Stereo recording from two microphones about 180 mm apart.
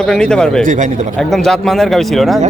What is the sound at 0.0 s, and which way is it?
Speech, 5° left (ahead or behind).